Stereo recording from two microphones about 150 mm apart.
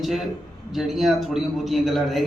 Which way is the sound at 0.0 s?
Centre (ahead or behind).